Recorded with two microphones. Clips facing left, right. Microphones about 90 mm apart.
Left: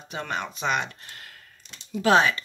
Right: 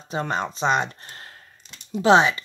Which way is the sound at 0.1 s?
30° right (ahead or behind).